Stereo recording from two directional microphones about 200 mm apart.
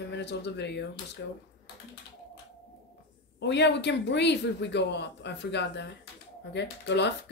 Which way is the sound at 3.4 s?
60° left (ahead or behind).